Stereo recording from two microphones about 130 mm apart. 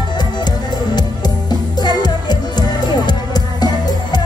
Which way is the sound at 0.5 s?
30° left (ahead or behind).